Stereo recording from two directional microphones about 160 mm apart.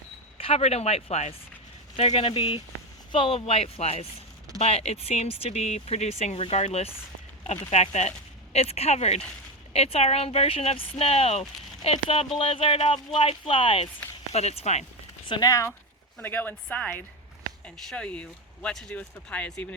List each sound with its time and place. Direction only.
0.3 s speech: 35° left (ahead or behind)
15.3 s speech: 25° left (ahead or behind); by 19.6 s 5° left (ahead or behind)